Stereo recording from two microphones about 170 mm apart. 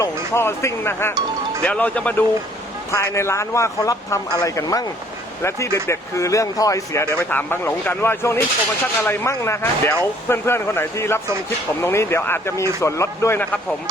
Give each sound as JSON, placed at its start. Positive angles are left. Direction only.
{"t": 0.0, "sound": "speech", "side_deg": 15}